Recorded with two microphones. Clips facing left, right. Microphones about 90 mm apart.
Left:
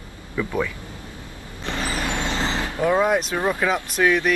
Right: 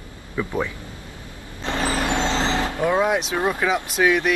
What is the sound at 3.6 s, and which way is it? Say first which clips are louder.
Speech: right 1 dB; 5° right (ahead or behind).